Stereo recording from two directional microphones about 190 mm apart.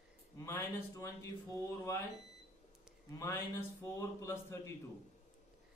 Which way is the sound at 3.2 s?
15° left (ahead or behind).